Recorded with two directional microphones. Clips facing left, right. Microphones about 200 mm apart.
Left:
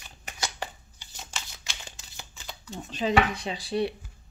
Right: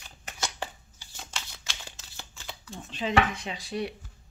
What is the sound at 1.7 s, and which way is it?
Shuffling cards, 15° left (ahead or behind).